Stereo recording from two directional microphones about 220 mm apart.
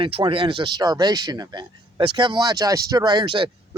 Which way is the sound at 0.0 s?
25° right (ahead or behind).